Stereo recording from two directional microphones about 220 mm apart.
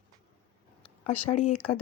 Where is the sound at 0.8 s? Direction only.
30° left (ahead or behind).